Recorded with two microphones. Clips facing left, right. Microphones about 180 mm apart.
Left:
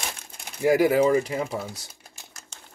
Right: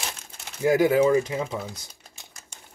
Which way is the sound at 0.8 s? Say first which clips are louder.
Even; 25° right (ahead or behind).